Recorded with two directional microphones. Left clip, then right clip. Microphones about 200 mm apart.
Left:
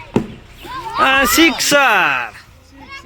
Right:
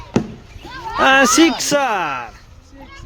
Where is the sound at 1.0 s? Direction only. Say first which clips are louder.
Even; 25° right (ahead or behind).